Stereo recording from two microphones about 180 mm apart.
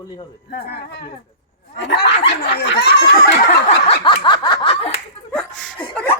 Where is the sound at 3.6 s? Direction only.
35° left (ahead or behind).